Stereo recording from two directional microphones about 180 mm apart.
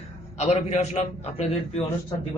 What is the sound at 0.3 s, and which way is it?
A man's voice, 40° left (ahead or behind).